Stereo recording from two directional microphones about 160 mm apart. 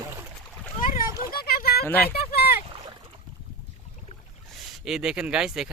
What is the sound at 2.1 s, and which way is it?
Boat, 75° left (ahead or behind).